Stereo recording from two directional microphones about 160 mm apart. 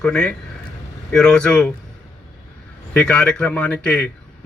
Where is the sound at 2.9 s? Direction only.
5° left (ahead or behind).